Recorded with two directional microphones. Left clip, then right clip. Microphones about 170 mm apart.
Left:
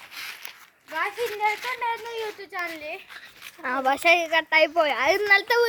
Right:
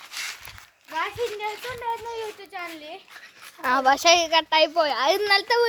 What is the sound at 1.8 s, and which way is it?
Speech, 80° left.